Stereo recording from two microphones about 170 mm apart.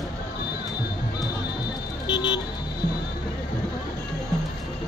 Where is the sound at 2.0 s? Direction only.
25° left (ahead or behind).